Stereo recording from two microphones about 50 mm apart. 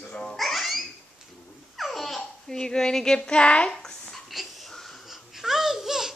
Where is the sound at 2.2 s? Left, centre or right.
Centre.